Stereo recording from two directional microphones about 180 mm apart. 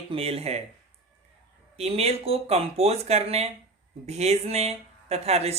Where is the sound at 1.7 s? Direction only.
35° right (ahead or behind).